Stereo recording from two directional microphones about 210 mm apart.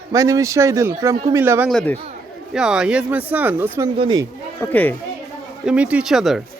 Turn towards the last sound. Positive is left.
turn(degrees=0)  # may be behind; listen again after turning